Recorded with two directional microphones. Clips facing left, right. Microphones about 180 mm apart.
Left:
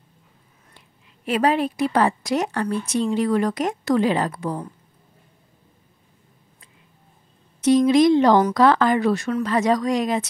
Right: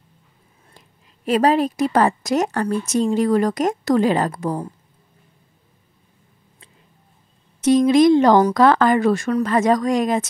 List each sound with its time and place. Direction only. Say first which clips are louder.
0.7 s a woman's voice: right 2 dB; 40° right (ahead or behind)
7.6 s a woman's voice: right 2 dB; 45° right (ahead or behind)